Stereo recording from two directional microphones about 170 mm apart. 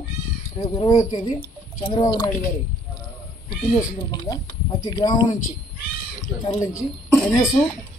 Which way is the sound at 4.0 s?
25° left (ahead or behind).